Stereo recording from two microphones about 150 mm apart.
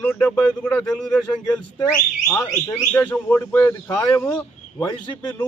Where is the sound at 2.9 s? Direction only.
10° left (ahead or behind).